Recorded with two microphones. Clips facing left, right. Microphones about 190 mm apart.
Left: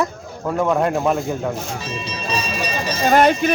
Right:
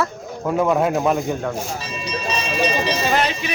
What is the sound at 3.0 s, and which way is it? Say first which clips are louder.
Speech: left 6 dB; 50° left (ahead or behind).